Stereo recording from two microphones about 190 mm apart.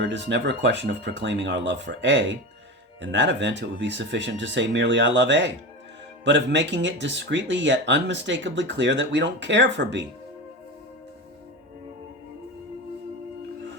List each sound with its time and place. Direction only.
0.0 s speech: 65° right (ahead or behind)